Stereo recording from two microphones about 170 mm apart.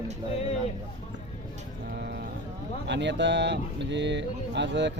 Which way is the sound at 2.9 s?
90° right.